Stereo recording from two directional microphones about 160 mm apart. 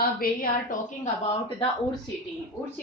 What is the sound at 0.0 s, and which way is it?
Speech, 65° left (ahead or behind).